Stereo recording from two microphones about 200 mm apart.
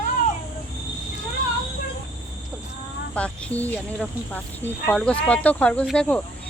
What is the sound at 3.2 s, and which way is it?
Speech, 5° left (ahead or behind).